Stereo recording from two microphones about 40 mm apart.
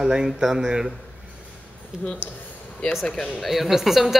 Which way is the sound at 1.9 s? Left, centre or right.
Centre.